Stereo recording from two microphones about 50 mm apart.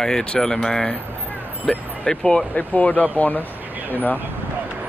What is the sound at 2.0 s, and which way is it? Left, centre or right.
Speech, left.